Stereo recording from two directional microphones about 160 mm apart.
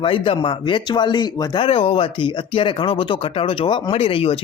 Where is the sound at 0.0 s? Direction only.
30° left (ahead or behind).